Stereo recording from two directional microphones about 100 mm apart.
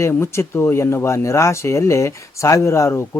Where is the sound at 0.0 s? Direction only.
25° left (ahead or behind).